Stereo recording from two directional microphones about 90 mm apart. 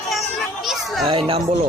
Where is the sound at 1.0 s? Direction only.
80° right.